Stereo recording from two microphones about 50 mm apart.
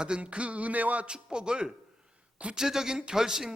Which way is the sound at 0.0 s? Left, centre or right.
Right.